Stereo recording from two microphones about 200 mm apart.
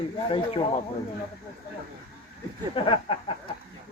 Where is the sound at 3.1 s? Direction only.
25° left (ahead or behind).